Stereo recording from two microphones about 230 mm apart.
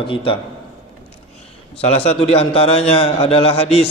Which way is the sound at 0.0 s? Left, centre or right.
Left.